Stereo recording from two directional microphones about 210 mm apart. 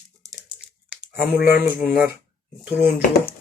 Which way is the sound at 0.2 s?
15° right (ahead or behind).